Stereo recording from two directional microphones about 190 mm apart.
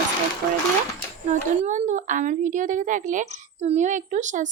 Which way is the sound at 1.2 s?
40° right (ahead or behind).